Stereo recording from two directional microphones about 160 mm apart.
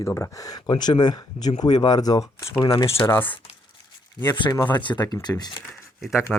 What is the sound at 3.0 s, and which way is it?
Speech, 15° left (ahead or behind).